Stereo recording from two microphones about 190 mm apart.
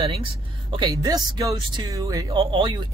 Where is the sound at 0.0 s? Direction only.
30° right (ahead or behind).